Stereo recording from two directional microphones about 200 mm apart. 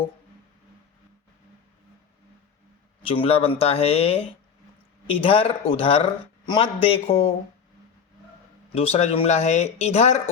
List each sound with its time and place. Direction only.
3.0 s a man's voice: 25° left (ahead or behind)
8.7 s speech: 30° left (ahead or behind)